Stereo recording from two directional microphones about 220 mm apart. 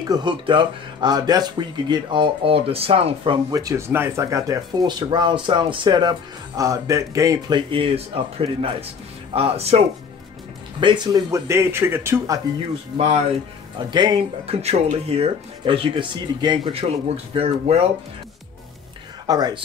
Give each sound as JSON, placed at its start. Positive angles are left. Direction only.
{"t": 0.1, "sound": "speech", "side_deg": -20}
{"t": 3.5, "sound": "speech", "side_deg": -15}
{"t": 12.5, "sound": "speech", "side_deg": -30}
{"t": 19.2, "sound": "speech", "side_deg": -20}